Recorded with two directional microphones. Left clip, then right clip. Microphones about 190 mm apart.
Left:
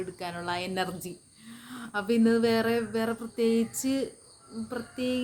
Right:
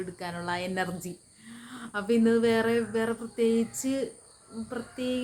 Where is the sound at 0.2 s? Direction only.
15° left (ahead or behind).